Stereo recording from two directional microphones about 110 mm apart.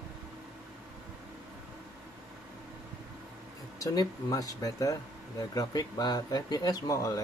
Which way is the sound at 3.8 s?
30° left (ahead or behind).